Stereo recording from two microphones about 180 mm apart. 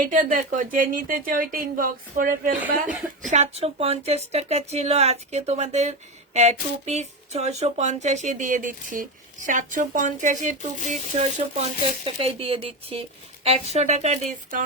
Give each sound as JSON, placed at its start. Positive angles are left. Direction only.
{"t": 0.0, "sound": "speech", "side_deg": -50}
{"t": 3.2, "sound": "speech", "side_deg": -40}